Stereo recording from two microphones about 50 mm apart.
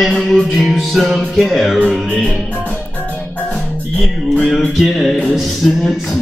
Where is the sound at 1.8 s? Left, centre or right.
Centre.